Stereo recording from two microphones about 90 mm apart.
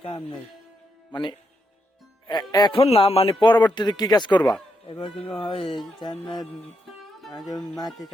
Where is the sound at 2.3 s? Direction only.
55° left (ahead or behind).